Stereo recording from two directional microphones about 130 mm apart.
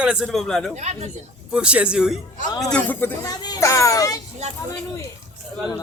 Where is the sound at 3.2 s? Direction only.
30° left (ahead or behind).